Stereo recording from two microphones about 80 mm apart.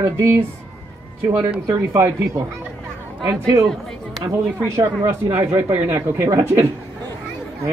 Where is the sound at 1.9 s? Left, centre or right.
Right.